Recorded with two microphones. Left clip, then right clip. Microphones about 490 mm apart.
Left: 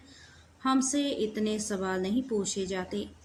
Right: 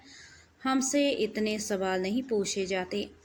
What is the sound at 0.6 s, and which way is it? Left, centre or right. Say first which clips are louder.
A woman's voice: right 1 dB; left.